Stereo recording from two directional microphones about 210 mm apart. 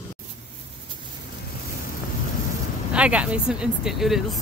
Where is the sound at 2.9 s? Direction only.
5° right (ahead or behind).